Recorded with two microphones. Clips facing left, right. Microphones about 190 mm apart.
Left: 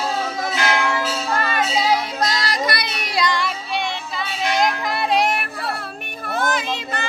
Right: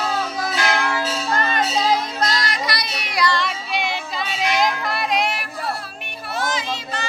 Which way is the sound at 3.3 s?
10° left (ahead or behind).